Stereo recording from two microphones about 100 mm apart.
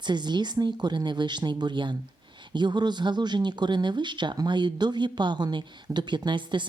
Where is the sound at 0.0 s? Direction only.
45° right (ahead or behind).